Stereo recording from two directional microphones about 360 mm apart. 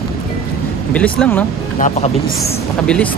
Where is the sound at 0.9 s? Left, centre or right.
Centre.